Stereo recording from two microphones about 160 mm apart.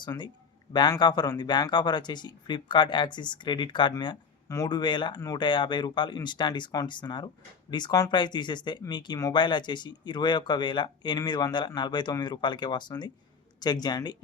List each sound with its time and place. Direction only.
0.0 s speech: 25° left (ahead or behind)